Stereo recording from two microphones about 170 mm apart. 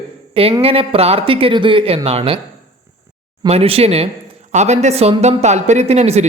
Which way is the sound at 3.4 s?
35° right (ahead or behind).